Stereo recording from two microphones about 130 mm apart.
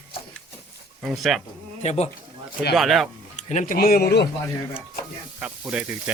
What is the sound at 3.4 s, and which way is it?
Speech, 80° left.